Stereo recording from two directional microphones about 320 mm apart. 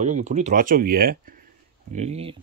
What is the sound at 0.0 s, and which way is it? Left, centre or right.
Speech, right.